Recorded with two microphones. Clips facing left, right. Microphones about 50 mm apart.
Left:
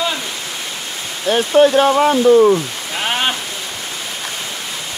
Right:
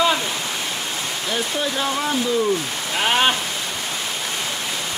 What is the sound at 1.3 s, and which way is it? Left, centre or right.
Speech, left.